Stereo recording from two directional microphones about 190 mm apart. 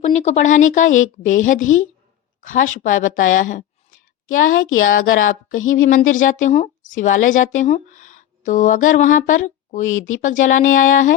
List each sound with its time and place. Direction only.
0.0 s a woman's voice: 35° left (ahead or behind)
1.7 s a woman's voice: 90° left
2.4 s speech: 45° left (ahead or behind)
4.3 s a woman's voice: 90° left
5.9 s a woman's voice: 45° left (ahead or behind)